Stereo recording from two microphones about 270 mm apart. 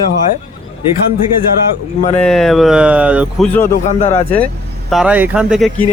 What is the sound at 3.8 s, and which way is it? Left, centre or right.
Speech, left.